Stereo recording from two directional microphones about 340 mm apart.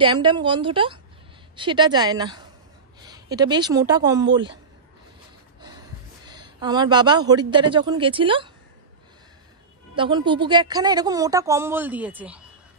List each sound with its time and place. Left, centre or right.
0.0 s a woman's voice: centre
6.2 s a woman's voice: centre
9.9 s a woman's voice: centre